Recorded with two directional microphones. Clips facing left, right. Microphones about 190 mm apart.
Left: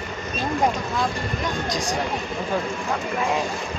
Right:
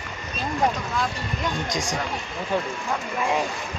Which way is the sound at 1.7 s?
45° right (ahead or behind).